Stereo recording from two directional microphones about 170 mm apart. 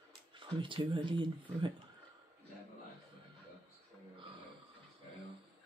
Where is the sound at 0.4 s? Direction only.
30° right (ahead or behind).